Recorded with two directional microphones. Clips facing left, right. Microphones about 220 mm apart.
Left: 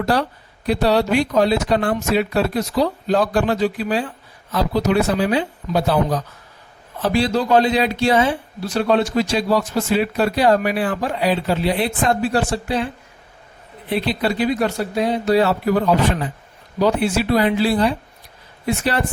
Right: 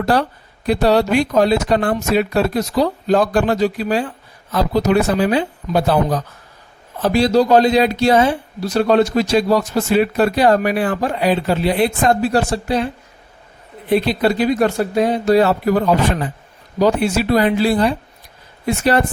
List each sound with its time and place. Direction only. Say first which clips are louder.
0.0 s speech: right 2 dB; 50° right (ahead or behind)
13.9 s speech: right 5 dB; 45° right (ahead or behind)
16.8 s speech: right 2 dB; 45° right (ahead or behind)